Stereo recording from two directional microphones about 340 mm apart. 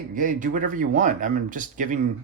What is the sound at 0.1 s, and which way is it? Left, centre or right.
Speech, right.